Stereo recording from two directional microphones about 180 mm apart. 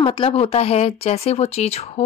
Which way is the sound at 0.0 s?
30° left (ahead or behind).